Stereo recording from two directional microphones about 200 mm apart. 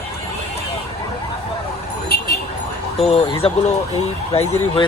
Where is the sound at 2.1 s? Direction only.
50° left (ahead or behind).